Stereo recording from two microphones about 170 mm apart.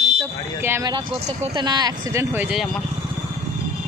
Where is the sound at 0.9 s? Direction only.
35° right (ahead or behind).